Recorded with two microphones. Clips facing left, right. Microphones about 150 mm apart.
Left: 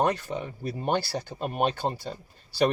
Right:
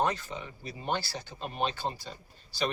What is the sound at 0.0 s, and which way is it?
Speech, 60° left (ahead or behind).